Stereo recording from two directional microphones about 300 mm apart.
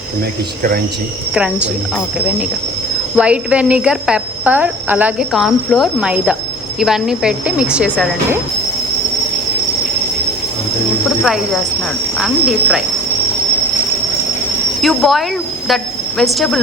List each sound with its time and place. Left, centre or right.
1.3 s cricket: centre
3.2 s cricket: centre
11.2 s cricket: centre
14.8 s a woman's voice: centre